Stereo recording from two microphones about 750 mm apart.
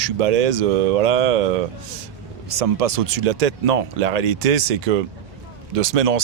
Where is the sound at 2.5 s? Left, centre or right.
Right.